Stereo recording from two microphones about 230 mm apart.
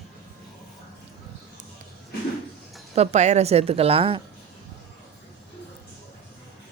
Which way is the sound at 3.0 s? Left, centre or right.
Right.